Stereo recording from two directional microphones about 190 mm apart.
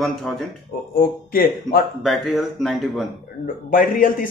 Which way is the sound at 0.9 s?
50° left (ahead or behind).